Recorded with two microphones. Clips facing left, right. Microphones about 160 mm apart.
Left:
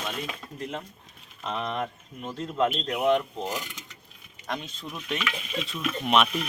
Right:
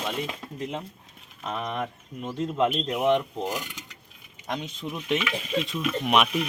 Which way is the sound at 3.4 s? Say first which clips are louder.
Right 2 dB; 10° right (ahead or behind).